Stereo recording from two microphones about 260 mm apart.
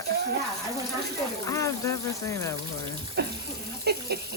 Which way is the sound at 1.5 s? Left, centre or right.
Centre.